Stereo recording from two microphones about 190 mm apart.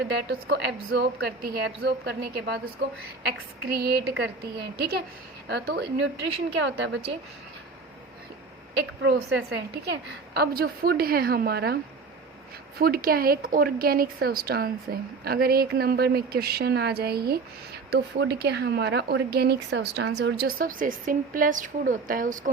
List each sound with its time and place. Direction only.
0.0 s speech: 60° right (ahead or behind)
6.7 s a woman's voice: 75° right (ahead or behind)
9.0 s a woman's voice: 70° right (ahead or behind)
10.3 s a woman's voice: 55° right (ahead or behind)
12.8 s a woman's voice: 50° right (ahead or behind)
20.6 s a woman's voice: 45° right (ahead or behind)